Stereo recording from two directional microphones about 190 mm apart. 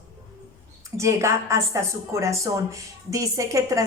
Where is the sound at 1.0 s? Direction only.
15° right (ahead or behind).